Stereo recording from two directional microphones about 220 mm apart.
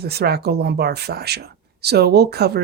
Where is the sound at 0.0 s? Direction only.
45° right (ahead or behind).